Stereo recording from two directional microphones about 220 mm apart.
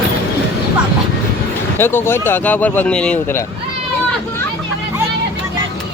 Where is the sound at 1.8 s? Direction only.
10° left (ahead or behind).